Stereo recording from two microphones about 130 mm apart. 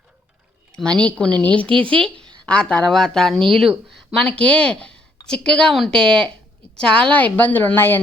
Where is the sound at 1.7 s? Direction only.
40° right (ahead or behind).